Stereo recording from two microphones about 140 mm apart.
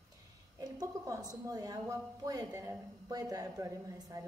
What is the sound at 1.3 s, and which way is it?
A woman's voice, 25° right (ahead or behind).